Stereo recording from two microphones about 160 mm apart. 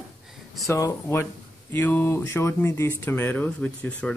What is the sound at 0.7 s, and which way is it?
Speech, 20° left (ahead or behind).